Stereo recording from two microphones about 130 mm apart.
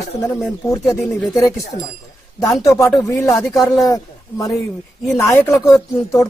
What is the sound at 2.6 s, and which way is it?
Speech, 25° left (ahead or behind).